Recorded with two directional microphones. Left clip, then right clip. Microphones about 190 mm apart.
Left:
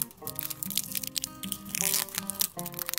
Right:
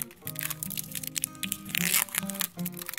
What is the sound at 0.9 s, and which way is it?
Music, 10° left (ahead or behind).